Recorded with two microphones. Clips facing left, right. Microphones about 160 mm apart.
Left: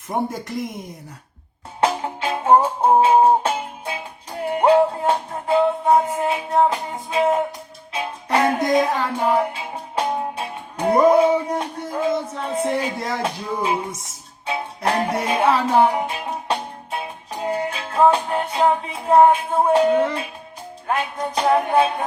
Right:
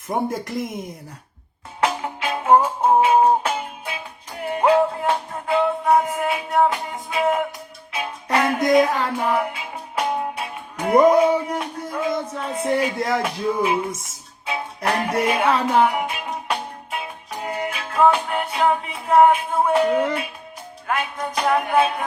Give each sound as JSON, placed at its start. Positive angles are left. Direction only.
{"t": 0.1, "sound": "speech", "side_deg": 0}
{"t": 1.8, "sound": "music", "side_deg": 30}
{"t": 13.0, "sound": "speech", "side_deg": 0}
{"t": 13.2, "sound": "music", "side_deg": 30}
{"t": 17.4, "sound": "music", "side_deg": 30}